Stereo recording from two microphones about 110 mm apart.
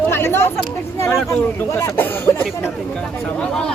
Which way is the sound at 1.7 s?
25° left (ahead or behind).